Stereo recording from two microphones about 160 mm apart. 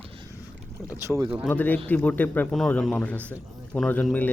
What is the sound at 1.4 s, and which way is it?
Speech, 10° left (ahead or behind).